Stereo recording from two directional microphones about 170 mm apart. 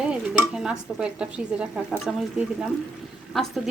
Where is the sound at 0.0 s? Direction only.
5° right (ahead or behind).